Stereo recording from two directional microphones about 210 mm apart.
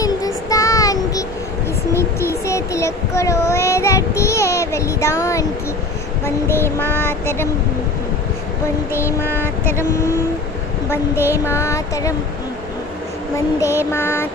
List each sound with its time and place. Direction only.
0.0 s child singing: 15° left (ahead or behind)
9.2 s child singing: 10° left (ahead or behind)
10.9 s child singing: 10° left (ahead or behind)
13.6 s child singing: 15° left (ahead or behind)